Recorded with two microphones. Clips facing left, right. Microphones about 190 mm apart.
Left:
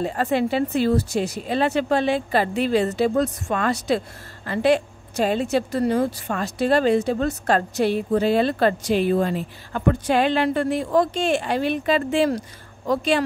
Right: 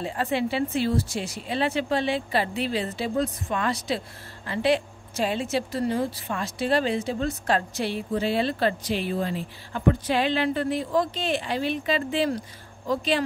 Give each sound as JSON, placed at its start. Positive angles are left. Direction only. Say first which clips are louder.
{"t": 0.0, "sound": "a woman's voice", "louder": "left 5 dB", "side_deg": 45}
{"t": 2.9, "sound": "a woman's voice", "louder": "left 6 dB", "side_deg": 70}
{"t": 4.5, "sound": "a woman's voice", "louder": "left 4 dB", "side_deg": 45}
{"t": 12.8, "sound": "speech", "louder": "left 4 dB", "side_deg": 60}